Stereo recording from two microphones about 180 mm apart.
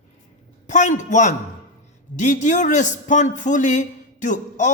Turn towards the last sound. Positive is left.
turn(degrees=45)  # may be behind; listen again after turning